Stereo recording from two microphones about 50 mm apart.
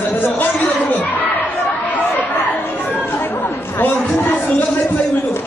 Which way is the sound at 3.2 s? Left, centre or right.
Left.